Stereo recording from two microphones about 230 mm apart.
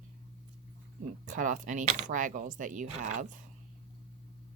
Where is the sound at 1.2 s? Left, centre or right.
Right.